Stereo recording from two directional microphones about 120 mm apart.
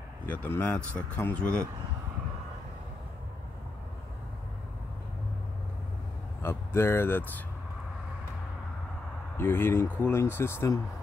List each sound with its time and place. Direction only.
0.3 s speech: 15° left (ahead or behind)
6.4 s speech: 20° left (ahead or behind)
9.4 s speech: 20° left (ahead or behind)